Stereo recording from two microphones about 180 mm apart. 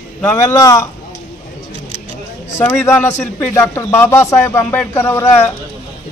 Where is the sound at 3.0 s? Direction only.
40° left (ahead or behind).